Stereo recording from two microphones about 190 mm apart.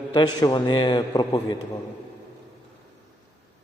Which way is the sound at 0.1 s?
20° left (ahead or behind).